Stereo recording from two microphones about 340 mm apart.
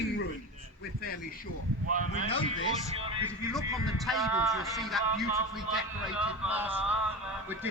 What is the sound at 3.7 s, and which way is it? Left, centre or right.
Speech, centre.